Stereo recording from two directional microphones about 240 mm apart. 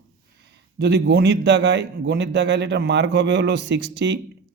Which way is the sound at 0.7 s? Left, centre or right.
Right.